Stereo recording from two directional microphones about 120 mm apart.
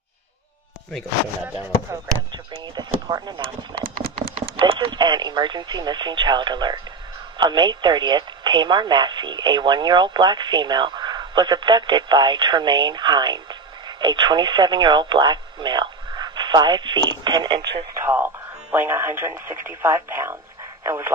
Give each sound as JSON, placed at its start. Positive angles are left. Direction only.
{"t": 1.4, "sound": "speech", "side_deg": -15}
{"t": 2.6, "sound": "speech", "side_deg": -35}
{"t": 18.0, "sound": "speech", "side_deg": -15}